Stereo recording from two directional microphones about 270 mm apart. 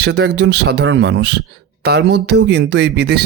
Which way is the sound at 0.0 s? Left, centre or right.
Right.